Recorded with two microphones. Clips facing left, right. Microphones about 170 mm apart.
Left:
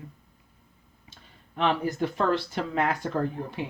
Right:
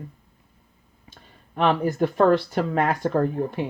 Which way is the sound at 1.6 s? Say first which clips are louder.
Right 5 dB; 45° right (ahead or behind).